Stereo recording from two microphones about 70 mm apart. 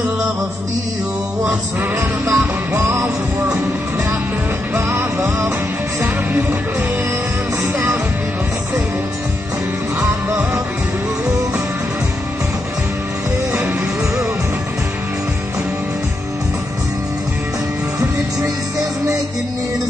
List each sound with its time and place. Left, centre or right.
2.0 s music: right